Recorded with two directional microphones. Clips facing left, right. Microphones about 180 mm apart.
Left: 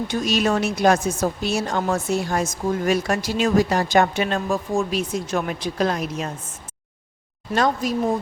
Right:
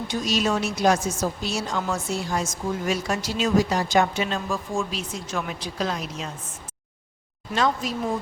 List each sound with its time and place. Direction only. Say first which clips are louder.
0.1 s speech: left 2 dB; 55° left (ahead or behind)
4.4 s speech: left 5 dB; 40° left (ahead or behind)
4.9 s speech: left 8 dB; 50° left (ahead or behind)
7.5 s speech: left 3 dB; 45° left (ahead or behind)